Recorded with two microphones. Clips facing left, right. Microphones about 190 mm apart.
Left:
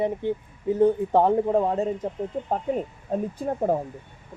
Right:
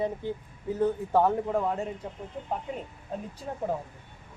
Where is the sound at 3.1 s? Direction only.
50° left (ahead or behind).